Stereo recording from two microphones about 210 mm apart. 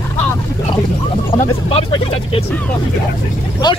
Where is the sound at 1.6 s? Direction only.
25° left (ahead or behind).